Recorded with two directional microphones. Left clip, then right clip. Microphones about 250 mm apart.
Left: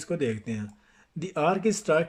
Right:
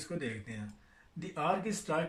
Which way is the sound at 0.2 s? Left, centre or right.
Left.